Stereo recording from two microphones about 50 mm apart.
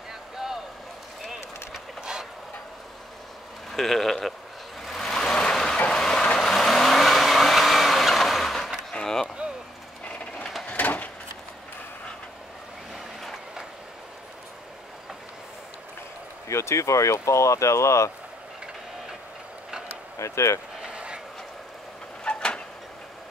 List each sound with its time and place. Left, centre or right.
1.2 s a sound: centre
3.7 s speech: centre
4.8 s vehicle: centre
8.9 s chop: centre
10.7 s a sound: left
12.9 s vehicle: centre
16.4 s speech: left
20.2 s speech: left
20.8 s a sound: centre
22.2 s vehicle: centre